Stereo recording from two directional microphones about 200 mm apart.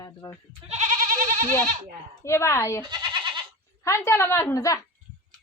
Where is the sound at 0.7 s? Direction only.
40° right (ahead or behind).